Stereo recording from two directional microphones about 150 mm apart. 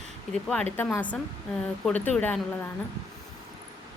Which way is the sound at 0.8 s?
15° left (ahead or behind).